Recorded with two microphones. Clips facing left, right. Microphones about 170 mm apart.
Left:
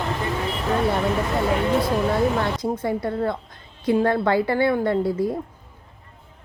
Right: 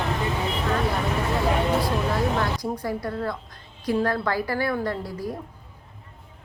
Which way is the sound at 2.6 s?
25° left (ahead or behind).